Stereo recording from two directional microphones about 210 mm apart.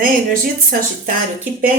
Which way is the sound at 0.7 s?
40° right (ahead or behind).